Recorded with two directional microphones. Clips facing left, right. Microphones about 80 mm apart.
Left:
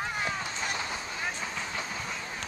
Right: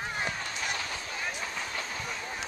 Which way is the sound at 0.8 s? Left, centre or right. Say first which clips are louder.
Left 1 dB; left.